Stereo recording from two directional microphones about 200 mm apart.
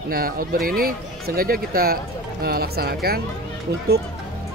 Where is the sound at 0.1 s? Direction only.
45° right (ahead or behind).